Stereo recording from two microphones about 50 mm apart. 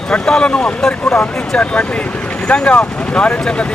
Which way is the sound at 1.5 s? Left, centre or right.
Left.